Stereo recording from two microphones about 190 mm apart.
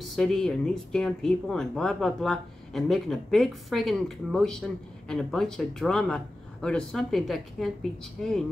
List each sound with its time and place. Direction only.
0.0 s speech: centre (ahead or behind)